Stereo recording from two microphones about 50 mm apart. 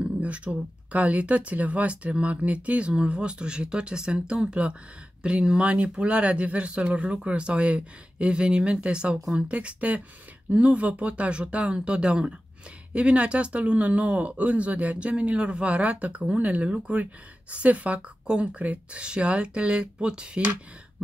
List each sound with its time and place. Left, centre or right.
0.0 s speech: right